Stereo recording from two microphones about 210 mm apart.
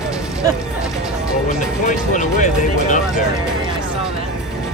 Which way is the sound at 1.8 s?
35° left (ahead or behind).